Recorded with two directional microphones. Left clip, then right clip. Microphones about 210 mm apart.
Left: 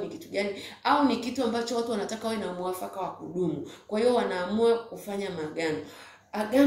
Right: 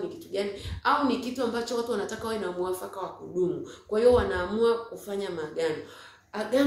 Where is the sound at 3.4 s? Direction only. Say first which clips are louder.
Right 3 dB; 5° right (ahead or behind).